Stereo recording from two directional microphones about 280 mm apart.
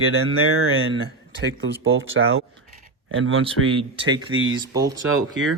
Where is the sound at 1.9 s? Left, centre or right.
Right.